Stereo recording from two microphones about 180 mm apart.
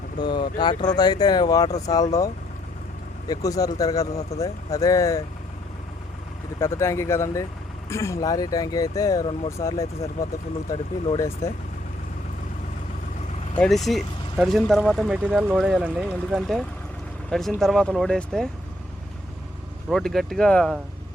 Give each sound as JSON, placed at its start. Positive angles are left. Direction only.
{"t": 0.2, "sound": "speech", "side_deg": 25}
{"t": 3.2, "sound": "speech", "side_deg": 20}
{"t": 6.6, "sound": "speech", "side_deg": 15}
{"t": 13.8, "sound": "speech", "side_deg": 0}
{"t": 19.9, "sound": "speech", "side_deg": 5}